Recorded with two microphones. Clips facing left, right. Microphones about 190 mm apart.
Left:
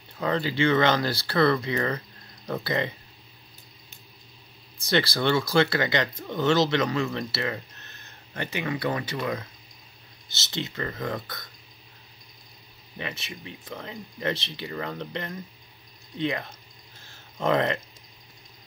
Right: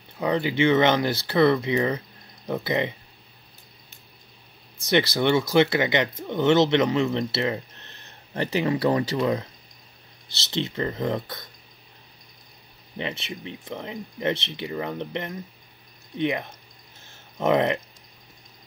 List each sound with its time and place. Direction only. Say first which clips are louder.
0.2 s speech: right 3 dB; 15° right (ahead or behind)
4.8 s speech: right 3 dB; 20° right (ahead or behind)
10.5 s speech: right 5 dB; 25° right (ahead or behind)
12.9 s speech: right 5 dB; 25° right (ahead or behind)
17.0 s a sound: right 3 dB; 20° right (ahead or behind)